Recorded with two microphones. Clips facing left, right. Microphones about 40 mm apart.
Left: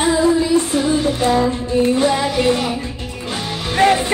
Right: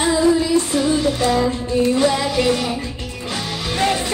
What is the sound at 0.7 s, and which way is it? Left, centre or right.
Female singing, left.